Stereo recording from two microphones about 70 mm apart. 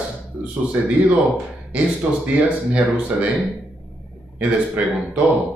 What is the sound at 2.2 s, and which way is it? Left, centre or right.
Speech, centre.